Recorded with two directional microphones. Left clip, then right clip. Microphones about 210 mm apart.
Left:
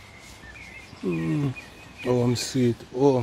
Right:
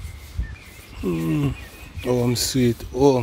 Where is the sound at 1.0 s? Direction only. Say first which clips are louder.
Right 4 dB; 25° right (ahead or behind).